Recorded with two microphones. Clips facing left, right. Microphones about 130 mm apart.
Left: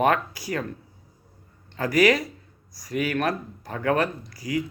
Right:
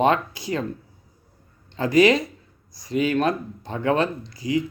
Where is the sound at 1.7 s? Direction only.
25° right (ahead or behind).